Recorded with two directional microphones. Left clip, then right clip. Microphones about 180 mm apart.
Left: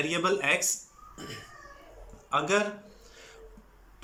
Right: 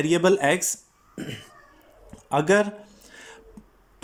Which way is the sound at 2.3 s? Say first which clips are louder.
Right 6 dB; 45° right (ahead or behind).